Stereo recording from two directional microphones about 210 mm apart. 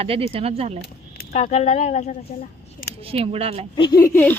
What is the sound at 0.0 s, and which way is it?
Speech, 25° right (ahead or behind).